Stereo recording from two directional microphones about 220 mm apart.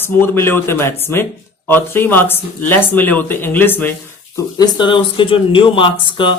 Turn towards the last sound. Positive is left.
turn(degrees=20)  # may be behind; listen again after turning